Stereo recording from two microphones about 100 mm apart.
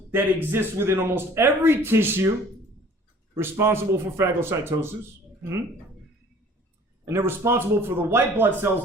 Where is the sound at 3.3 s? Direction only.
25° right (ahead or behind).